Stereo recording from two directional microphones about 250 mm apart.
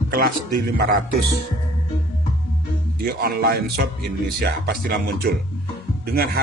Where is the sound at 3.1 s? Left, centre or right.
Right.